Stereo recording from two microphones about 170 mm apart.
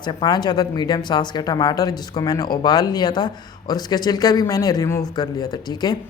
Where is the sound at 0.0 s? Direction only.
25° left (ahead or behind).